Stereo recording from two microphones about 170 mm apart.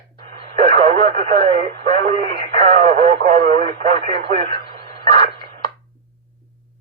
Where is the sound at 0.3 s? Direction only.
35° right (ahead or behind).